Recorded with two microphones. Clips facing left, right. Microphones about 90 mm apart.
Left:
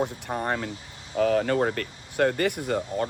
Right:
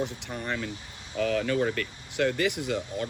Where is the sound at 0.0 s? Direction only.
50° left (ahead or behind).